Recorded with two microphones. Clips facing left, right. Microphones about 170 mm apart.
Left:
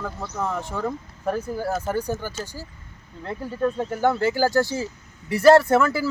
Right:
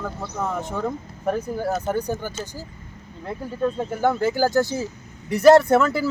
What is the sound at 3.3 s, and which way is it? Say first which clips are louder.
Speech: even; 10° right (ahead or behind).